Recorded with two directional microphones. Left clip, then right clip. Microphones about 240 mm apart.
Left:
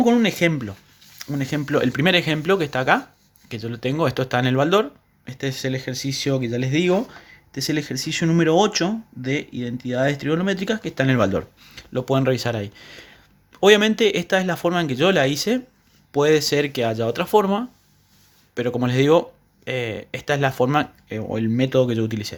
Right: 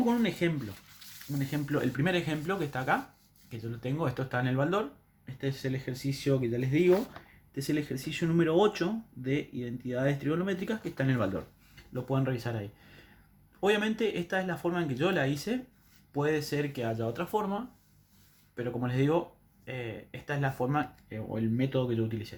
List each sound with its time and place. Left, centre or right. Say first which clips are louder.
0.0 s speech: left 11 dB; left